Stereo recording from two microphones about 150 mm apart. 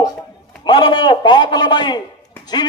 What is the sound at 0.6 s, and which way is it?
A man's voice, 30° left (ahead or behind).